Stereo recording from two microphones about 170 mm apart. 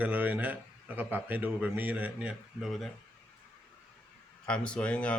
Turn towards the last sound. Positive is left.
turn(degrees=5)  # may be behind; listen again after turning